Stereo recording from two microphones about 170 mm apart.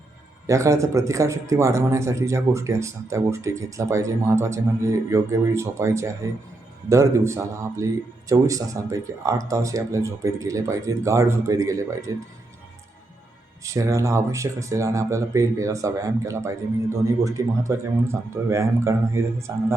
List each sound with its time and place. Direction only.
0.4 s speech: 20° right (ahead or behind)
13.6 s speech: 20° right (ahead or behind)